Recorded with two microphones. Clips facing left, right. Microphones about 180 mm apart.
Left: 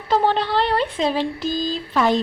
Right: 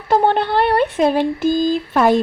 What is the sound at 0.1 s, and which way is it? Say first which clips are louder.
A woman's voice: right 3 dB; 55° right (ahead or behind).